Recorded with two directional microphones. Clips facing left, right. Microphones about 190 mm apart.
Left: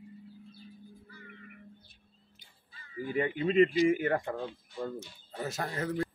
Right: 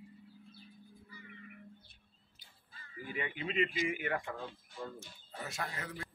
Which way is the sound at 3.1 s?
40° left (ahead or behind).